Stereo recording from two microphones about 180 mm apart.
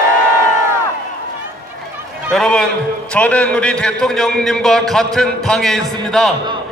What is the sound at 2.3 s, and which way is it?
A man's voice, 5° left (ahead or behind).